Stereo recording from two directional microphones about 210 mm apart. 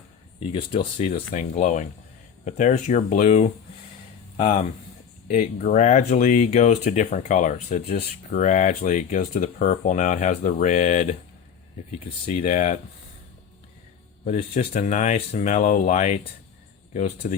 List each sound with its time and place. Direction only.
0.4 s speech: 25° left (ahead or behind)
12.5 s speech: 40° left (ahead or behind)
14.3 s speech: 35° left (ahead or behind)
17.2 s speech: 40° left (ahead or behind)